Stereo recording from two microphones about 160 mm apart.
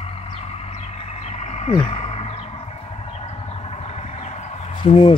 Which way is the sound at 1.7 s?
30° left (ahead or behind).